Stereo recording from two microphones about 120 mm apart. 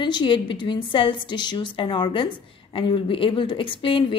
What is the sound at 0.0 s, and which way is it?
A woman's voice, 40° left (ahead or behind).